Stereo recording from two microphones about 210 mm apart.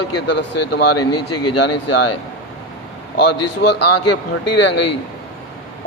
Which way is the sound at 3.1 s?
55° left (ahead or behind).